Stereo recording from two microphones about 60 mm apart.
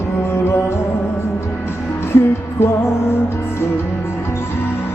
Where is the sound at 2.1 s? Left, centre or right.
Left.